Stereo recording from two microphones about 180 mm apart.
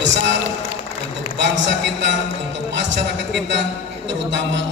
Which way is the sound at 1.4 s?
80° right.